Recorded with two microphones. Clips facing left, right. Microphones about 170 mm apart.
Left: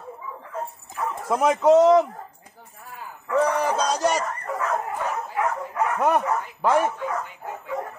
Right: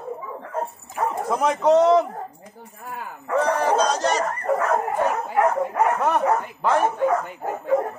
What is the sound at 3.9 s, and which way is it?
Speech, 10° left (ahead or behind).